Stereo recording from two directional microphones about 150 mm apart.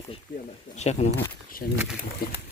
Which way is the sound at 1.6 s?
90° left.